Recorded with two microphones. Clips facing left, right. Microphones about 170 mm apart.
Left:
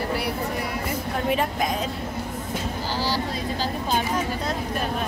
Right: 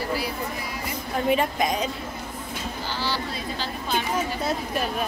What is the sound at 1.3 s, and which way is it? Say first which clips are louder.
Speech: right 2 dB; centre (ahead or behind).